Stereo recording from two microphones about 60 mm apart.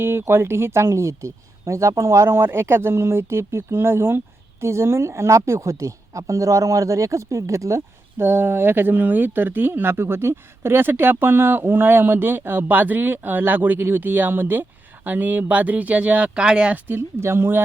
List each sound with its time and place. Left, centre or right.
0.0 s a woman's voice: right
8.2 s speech: right; by 16.7 s centre
17.0 s speech: right